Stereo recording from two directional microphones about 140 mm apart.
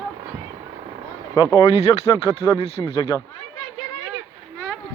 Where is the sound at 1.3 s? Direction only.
35° left (ahead or behind).